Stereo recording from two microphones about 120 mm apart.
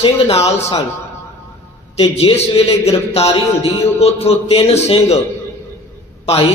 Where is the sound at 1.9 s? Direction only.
55° left (ahead or behind).